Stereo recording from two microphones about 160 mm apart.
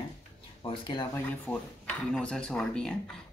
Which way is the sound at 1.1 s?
10° left (ahead or behind).